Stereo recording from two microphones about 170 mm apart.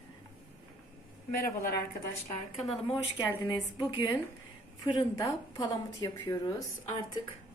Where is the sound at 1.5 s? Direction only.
60° left (ahead or behind).